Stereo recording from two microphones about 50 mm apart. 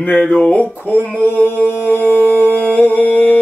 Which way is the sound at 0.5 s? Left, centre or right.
Left.